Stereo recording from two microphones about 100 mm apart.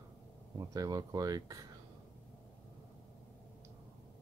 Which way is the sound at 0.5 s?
40° right (ahead or behind).